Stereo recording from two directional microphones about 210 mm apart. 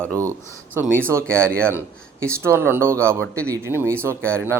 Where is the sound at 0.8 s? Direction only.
10° right (ahead or behind).